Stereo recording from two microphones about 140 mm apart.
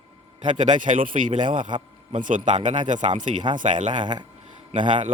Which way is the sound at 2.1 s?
65° right (ahead or behind).